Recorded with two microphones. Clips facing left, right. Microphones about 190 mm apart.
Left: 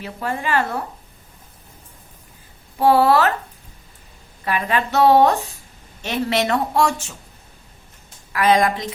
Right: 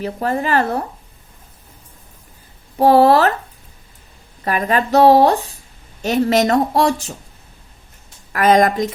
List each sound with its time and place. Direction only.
0.0 s a woman's voice: 40° right (ahead or behind)
2.7 s a woman's voice: 40° right (ahead or behind)
4.4 s a woman's voice: 40° right (ahead or behind)
8.3 s a woman's voice: 45° right (ahead or behind)